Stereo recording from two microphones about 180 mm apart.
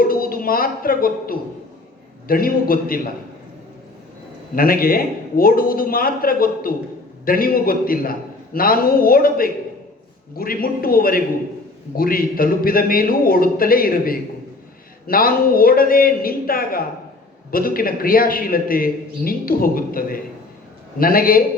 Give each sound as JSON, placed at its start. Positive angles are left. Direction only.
{"t": 0.0, "sound": "a woman's voice", "side_deg": 55}
{"t": 4.5, "sound": "a man's voice", "side_deg": 55}